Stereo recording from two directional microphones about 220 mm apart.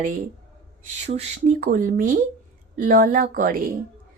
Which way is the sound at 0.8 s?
30° right (ahead or behind).